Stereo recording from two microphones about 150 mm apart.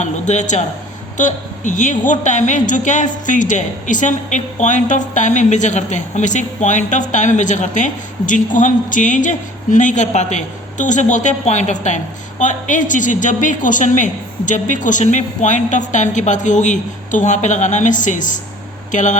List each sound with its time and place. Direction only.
0.0 s a man's voice: 55° left (ahead or behind)